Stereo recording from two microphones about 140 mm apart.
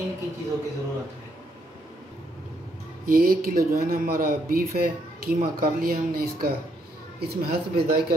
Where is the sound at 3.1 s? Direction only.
90° right.